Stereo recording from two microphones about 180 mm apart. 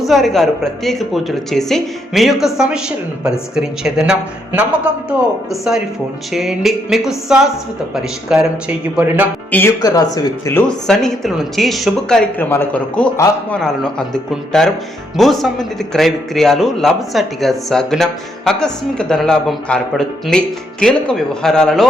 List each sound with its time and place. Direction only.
0.1 s speech: centre (ahead or behind)
6.3 s speech: centre (ahead or behind)
9.5 s speech: 10° left (ahead or behind)
9.8 s speech: 20° left (ahead or behind)
10.7 s speech: 5° left (ahead or behind)